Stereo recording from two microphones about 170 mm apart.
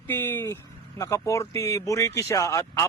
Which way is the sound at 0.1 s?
15° left (ahead or behind).